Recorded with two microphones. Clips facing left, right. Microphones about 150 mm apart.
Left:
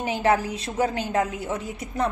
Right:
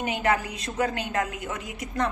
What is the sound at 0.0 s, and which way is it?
Speech, 30° left (ahead or behind).